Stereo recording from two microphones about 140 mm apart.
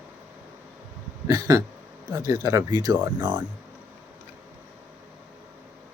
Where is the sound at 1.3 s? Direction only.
25° right (ahead or behind).